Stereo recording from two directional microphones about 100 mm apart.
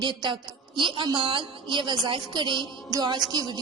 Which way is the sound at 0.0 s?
50° right (ahead or behind).